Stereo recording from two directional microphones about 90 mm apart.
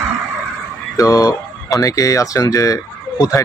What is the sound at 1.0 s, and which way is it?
Speech, 40° left (ahead or behind).